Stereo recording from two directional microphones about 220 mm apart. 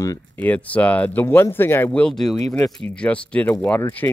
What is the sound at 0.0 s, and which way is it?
Speech, 10° left (ahead or behind).